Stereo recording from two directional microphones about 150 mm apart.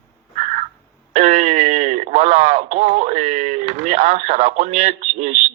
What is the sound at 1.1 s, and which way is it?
Speech, 50° right (ahead or behind).